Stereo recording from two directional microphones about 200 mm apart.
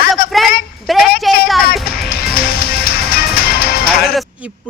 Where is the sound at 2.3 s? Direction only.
50° left (ahead or behind).